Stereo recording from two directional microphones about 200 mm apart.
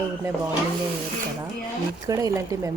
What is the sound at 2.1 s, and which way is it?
Speech, 15° right (ahead or behind).